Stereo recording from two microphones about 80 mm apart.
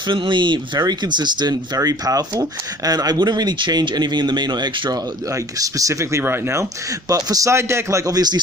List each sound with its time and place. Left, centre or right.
0.1 s speech: right
5.3 s a man's voice: right
7.1 s a man's voice: right